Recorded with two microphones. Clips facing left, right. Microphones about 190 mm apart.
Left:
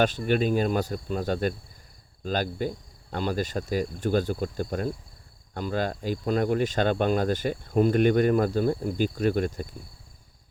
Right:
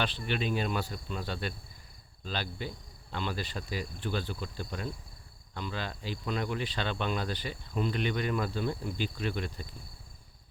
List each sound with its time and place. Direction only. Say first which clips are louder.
0.0 s speech: left 9 dB; 45° left (ahead or behind)